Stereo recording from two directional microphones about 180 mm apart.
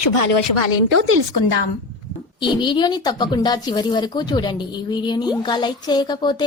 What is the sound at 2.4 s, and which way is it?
A woman's voice, 25° left (ahead or behind).